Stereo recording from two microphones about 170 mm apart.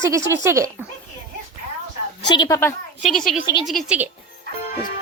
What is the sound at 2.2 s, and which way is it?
Speech, 25° left (ahead or behind).